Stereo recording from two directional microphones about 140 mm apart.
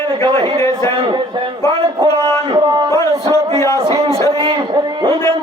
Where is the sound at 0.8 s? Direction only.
35° right (ahead or behind).